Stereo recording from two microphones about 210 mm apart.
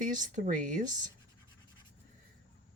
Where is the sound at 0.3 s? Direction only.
40° right (ahead or behind).